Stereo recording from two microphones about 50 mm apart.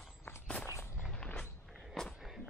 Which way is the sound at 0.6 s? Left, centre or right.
Left.